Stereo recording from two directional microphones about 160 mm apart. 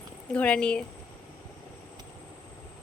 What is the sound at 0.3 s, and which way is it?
Speech, 10° left (ahead or behind).